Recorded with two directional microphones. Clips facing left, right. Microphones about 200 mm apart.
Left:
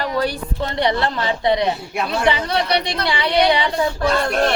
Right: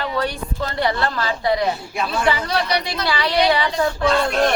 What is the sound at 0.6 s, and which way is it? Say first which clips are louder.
A woman's voice: left 2 dB; 20° left (ahead or behind).